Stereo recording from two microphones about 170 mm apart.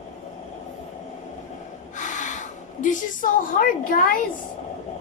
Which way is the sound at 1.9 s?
45° left (ahead or behind).